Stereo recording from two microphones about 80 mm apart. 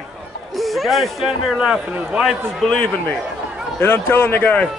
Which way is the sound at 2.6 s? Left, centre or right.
Centre.